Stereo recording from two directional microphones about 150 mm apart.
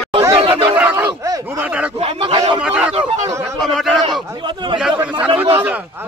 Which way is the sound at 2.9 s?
40° right (ahead or behind).